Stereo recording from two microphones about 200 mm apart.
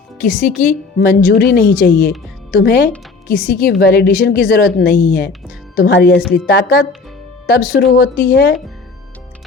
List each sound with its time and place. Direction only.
0.2 s a woman's voice: 40° left (ahead or behind)